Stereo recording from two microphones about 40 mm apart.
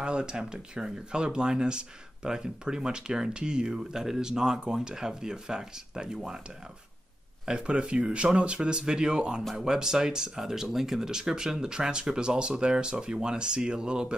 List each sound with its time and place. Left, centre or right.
0.0 s speech: right
7.4 s speech: right